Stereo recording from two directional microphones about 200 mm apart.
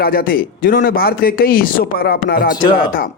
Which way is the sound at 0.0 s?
50° left (ahead or behind).